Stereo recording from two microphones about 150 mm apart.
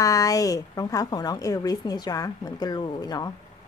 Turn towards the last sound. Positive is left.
turn(degrees=25)  # may be behind; listen again after turning